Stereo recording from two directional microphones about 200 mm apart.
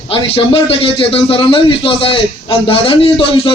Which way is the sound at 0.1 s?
25° left (ahead or behind).